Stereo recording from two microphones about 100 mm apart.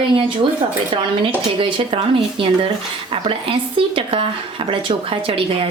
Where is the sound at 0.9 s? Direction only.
65° right (ahead or behind).